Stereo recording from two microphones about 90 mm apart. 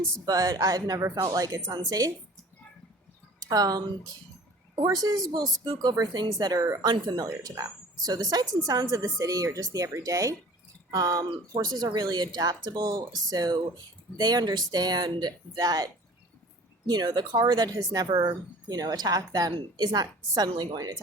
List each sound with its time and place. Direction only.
0.3 s a woman's voice: 40° right (ahead or behind)
3.5 s a woman's voice: 45° right (ahead or behind)
4.7 s a sound: 60° right (ahead or behind)
5.0 s a woman's voice: 45° right (ahead or behind)
6.8 s a woman's voice: 50° right (ahead or behind)